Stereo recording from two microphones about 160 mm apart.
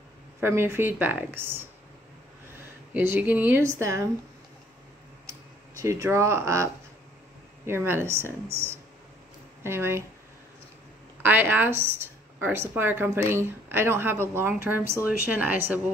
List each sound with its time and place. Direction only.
0.4 s a woman's voice: 15° right (ahead or behind)
2.9 s a woman's voice: 15° right (ahead or behind)
5.8 s a woman's voice: 20° right (ahead or behind)
11.2 s a woman's voice: 15° right (ahead or behind)